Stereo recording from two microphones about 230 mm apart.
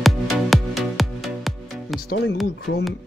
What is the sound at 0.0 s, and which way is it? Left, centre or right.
Music, centre.